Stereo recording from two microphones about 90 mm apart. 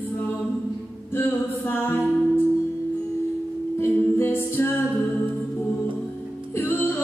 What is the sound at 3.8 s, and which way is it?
Music, 25° left (ahead or behind).